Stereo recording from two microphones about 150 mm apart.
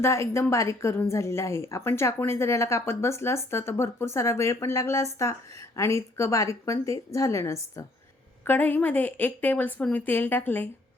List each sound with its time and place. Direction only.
0.0 s a woman's voice: 20° left (ahead or behind)